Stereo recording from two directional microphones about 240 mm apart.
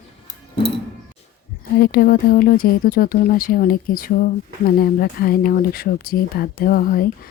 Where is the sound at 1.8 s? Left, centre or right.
Left.